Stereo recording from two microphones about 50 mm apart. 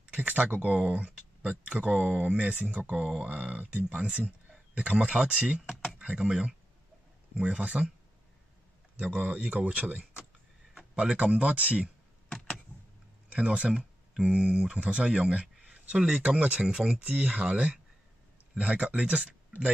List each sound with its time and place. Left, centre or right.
0.0 s a sound: right
1.7 s speech: right
7.4 s speech: right
8.9 s speech: right
11.0 s speech: right
13.3 s speech: right
15.7 s a sound: right
16.3 s speech: right
16.6 s speech: centre
17.0 s speech: right